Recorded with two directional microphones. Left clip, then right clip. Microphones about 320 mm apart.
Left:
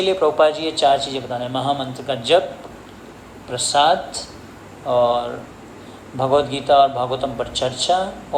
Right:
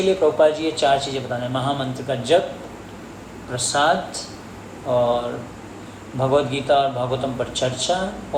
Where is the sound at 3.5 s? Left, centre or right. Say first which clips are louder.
Left 3 dB; centre.